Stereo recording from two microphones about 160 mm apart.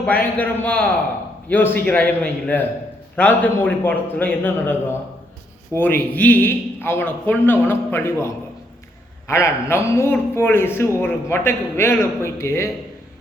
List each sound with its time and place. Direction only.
0.0 s a man's voice: 10° left (ahead or behind)